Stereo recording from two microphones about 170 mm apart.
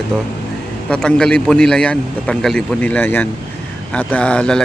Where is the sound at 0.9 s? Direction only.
5° left (ahead or behind).